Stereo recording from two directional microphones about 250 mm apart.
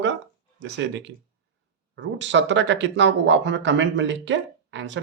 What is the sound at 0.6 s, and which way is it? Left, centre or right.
Speech, right.